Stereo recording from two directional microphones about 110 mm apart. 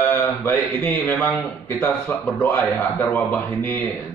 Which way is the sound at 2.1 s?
15° left (ahead or behind).